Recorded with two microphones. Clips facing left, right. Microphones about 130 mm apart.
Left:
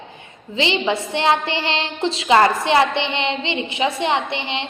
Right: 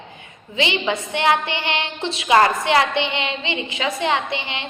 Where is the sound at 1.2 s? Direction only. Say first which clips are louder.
Even; 25° left (ahead or behind).